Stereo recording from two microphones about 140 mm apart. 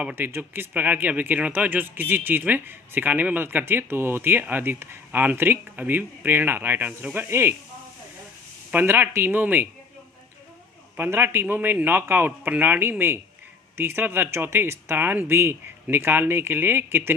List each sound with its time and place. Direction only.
0.0 s speech: 15° right (ahead or behind)
8.7 s speech: 15° right (ahead or behind)
10.9 s speech: 15° right (ahead or behind)